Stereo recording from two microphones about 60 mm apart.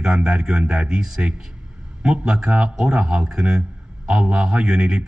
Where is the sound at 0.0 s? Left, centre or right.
Centre.